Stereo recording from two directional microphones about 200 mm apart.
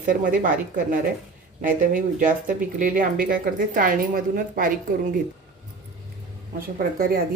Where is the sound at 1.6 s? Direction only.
40° right (ahead or behind).